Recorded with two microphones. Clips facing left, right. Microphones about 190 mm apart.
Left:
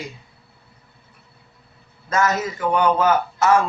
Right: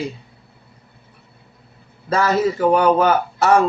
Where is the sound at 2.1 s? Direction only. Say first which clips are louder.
Right 4 dB; 35° right (ahead or behind).